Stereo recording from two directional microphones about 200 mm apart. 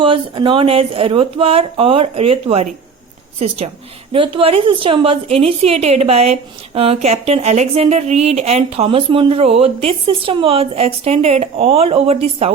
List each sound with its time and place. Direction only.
0.0 s a woman's voice: 25° right (ahead or behind)